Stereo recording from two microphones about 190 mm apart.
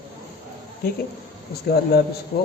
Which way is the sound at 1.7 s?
55° left (ahead or behind).